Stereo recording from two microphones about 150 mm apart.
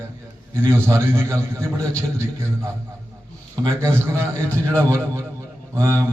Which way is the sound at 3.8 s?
15° right (ahead or behind).